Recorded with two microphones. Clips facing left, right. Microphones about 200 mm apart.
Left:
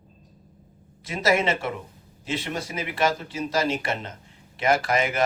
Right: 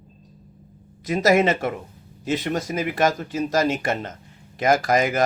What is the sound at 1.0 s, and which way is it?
Speech, 40° right (ahead or behind).